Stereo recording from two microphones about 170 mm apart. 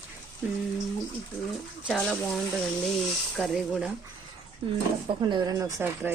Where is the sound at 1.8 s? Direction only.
5° left (ahead or behind).